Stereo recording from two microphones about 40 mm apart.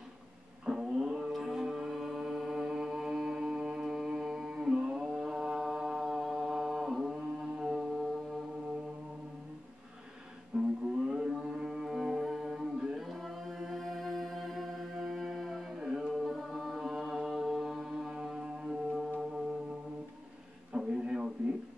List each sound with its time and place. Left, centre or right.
0.7 s a sound: centre
1.3 s music: centre
1.9 s mantra: centre
7.3 s music: centre
10.5 s music: centre
12.9 s mantra: centre
15.8 s music: centre
16.2 s music: centre
20.7 s a sound: right